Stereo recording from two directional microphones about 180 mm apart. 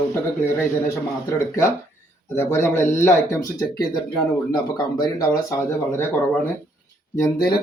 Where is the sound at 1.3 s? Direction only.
15° left (ahead or behind).